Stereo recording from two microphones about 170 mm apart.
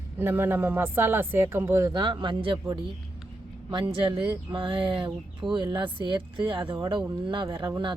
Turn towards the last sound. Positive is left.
turn(degrees=-25)  # may be behind; listen again after turning